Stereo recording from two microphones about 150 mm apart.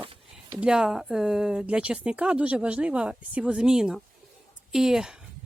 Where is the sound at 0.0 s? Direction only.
35° right (ahead or behind).